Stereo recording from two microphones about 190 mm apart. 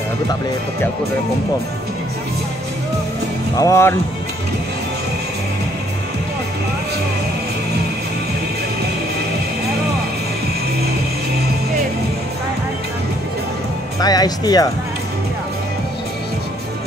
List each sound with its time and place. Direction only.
3.5 s speech: 15° left (ahead or behind)
13.9 s speech: 20° left (ahead or behind)